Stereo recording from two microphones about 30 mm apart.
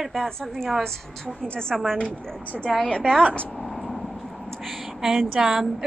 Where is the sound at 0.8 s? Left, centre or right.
Centre.